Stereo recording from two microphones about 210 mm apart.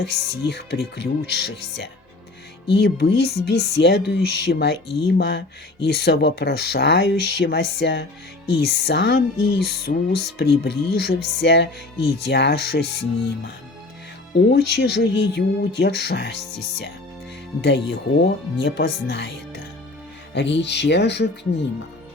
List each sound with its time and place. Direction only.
0.0 s speech: 50° left (ahead or behind)